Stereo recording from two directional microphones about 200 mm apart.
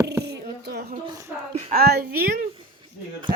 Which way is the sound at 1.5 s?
45° right (ahead or behind).